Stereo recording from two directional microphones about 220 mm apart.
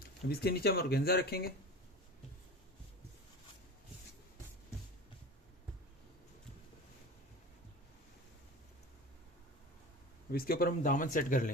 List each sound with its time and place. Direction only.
0.3 s speech: 45° left (ahead or behind)
10.3 s speech: 40° left (ahead or behind)